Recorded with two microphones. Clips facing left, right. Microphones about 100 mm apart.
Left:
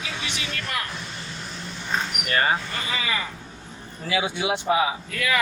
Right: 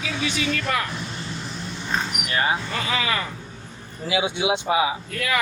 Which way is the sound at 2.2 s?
10° right (ahead or behind).